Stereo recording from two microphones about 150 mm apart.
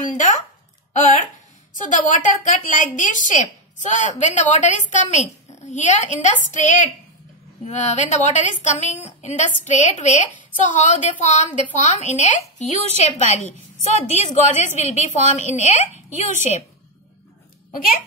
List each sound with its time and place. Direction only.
0.0 s a woman's voice: 60° left (ahead or behind)